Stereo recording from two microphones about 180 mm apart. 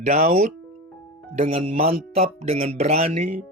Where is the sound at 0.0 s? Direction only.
40° right (ahead or behind).